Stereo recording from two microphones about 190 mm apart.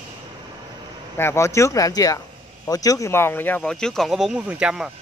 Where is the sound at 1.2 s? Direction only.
15° left (ahead or behind).